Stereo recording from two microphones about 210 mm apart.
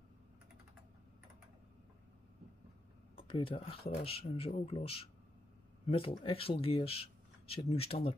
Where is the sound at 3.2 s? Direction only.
25° left (ahead or behind).